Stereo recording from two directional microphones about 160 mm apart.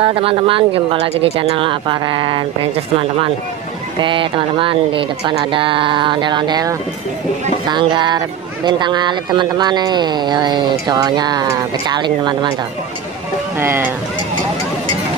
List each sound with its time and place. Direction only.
0.0 s speech: 35° right (ahead or behind)
4.0 s speech: 30° right (ahead or behind)
13.6 s speech: 15° right (ahead or behind)